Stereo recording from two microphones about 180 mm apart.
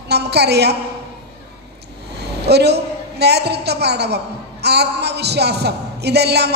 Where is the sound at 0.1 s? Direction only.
65° right (ahead or behind).